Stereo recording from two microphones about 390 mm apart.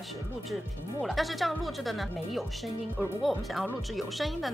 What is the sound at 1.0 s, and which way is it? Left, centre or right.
Speech, centre.